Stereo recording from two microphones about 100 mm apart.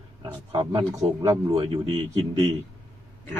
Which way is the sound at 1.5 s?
65° right (ahead or behind).